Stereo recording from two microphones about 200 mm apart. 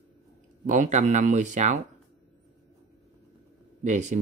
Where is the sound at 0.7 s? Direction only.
40° right (ahead or behind).